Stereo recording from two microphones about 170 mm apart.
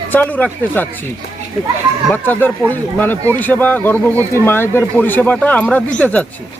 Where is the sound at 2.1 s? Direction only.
10° left (ahead or behind).